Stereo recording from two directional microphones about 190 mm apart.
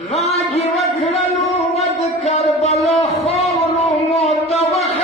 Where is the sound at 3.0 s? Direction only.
35° left (ahead or behind).